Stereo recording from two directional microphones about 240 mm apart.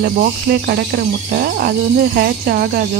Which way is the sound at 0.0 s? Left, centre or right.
Right.